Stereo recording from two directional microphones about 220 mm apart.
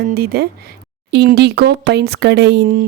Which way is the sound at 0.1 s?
45° right (ahead or behind).